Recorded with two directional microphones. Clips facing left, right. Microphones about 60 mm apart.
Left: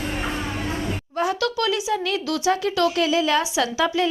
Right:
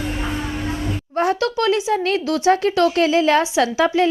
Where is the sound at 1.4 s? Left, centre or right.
Right.